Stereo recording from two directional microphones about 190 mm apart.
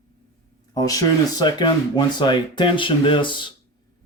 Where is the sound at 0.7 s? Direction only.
20° left (ahead or behind).